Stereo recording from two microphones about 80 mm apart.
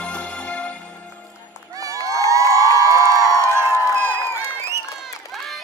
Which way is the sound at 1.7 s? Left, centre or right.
Right.